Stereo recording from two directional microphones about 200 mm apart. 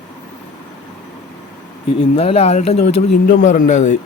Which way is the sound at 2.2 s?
30° left (ahead or behind).